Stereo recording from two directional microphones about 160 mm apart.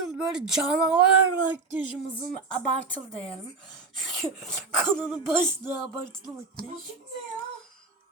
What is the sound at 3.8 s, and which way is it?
Throat clearing, centre (ahead or behind).